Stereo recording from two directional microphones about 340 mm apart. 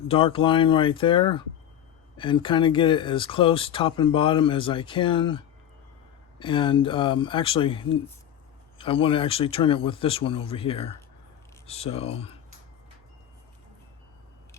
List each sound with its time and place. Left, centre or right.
0.1 s speech: centre